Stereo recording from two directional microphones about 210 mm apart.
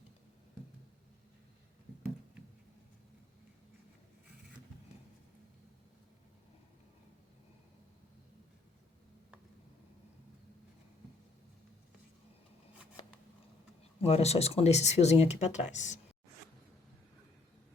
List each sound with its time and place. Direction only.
14.0 s speech: 30° left (ahead or behind)